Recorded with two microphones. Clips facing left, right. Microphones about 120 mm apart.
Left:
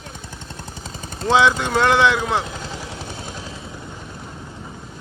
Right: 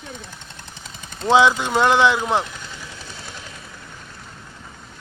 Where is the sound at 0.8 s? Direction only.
40° left (ahead or behind).